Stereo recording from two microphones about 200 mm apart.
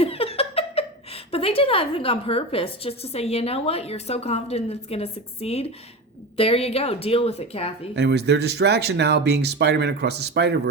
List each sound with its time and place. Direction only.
0.0 s speech: 30° left (ahead or behind)
7.9 s speech: 55° right (ahead or behind)